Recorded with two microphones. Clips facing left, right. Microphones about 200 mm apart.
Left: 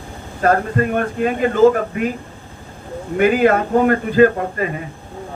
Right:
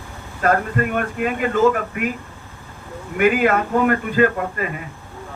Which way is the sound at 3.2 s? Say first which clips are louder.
Left 3 dB; 35° left (ahead or behind).